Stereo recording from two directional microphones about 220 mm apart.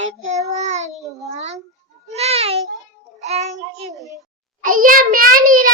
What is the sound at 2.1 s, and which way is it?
Meow, 30° right (ahead or behind).